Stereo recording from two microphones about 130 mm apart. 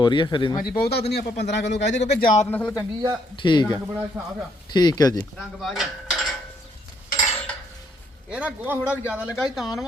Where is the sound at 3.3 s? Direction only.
35° left (ahead or behind).